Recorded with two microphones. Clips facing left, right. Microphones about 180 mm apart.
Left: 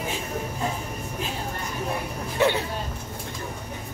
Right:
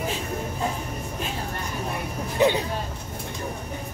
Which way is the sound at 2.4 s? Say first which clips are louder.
Right 2 dB; 15° right (ahead or behind).